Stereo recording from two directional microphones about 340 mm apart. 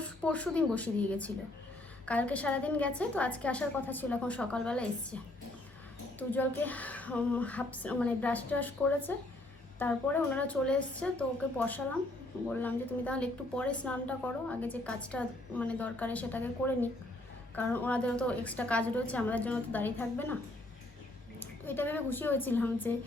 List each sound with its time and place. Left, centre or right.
0.0 s speech: centre
21.3 s a woman's voice: centre